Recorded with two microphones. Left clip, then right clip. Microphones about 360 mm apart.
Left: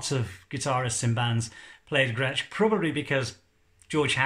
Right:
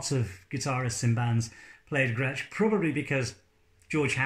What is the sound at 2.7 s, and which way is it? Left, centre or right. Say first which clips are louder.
Speech: left 1 dB; left.